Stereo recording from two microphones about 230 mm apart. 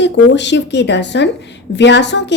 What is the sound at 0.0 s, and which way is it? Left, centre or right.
A woman's voice, left.